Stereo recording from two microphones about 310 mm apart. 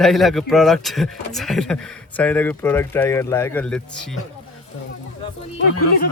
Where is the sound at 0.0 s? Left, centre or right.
Centre.